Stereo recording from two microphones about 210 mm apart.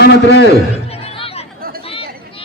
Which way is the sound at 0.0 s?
55° left (ahead or behind).